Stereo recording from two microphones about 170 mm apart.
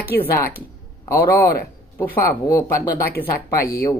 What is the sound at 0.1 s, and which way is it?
Speech, 70° left (ahead or behind).